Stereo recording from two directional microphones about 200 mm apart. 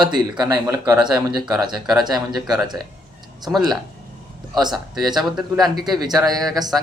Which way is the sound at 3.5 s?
Centre (ahead or behind).